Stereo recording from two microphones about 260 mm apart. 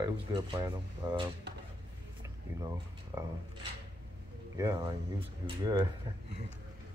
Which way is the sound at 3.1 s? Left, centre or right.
Centre.